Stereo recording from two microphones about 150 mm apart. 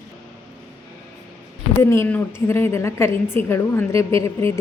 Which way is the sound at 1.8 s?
15° left (ahead or behind).